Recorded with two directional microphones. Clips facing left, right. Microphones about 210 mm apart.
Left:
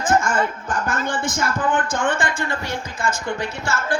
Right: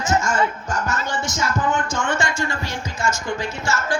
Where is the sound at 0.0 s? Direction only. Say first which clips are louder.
Left 1 dB; 55° left (ahead or behind).